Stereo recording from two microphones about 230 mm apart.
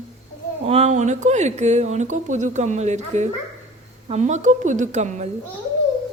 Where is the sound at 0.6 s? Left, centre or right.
Right.